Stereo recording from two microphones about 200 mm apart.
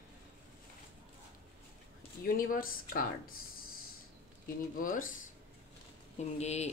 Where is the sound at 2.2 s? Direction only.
45° left (ahead or behind).